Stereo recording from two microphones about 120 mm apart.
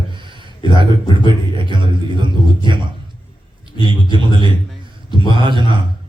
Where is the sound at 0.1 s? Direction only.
40° right (ahead or behind).